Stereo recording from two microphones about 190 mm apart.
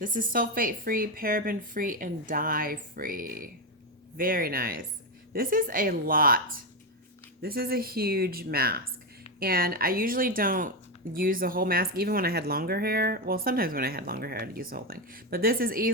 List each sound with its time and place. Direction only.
0.0 s speech: 45° right (ahead or behind)